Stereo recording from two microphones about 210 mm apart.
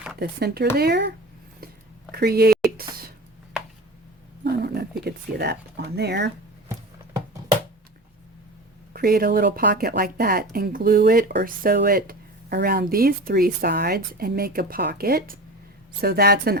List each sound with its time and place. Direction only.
0.2 s speech: 50° right (ahead or behind)
2.1 s speech: 45° right (ahead or behind)
4.4 s a sound: 50° right (ahead or behind)
8.9 s speech: 45° right (ahead or behind)